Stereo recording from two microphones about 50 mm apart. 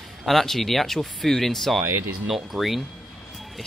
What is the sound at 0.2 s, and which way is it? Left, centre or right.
Speech, centre.